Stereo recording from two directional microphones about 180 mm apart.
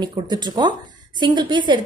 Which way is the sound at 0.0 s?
25° right (ahead or behind).